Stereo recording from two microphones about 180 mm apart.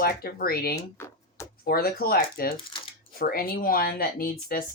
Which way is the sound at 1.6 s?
55° left (ahead or behind).